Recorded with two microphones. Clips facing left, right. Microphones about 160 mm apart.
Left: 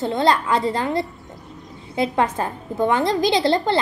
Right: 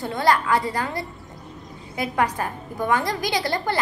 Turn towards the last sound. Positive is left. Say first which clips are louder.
# left 6 dB
turn(degrees=25)  # may be behind; listen again after turning